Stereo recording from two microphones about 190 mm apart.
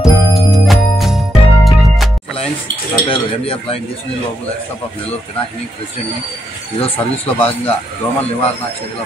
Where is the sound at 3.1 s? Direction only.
30° left (ahead or behind).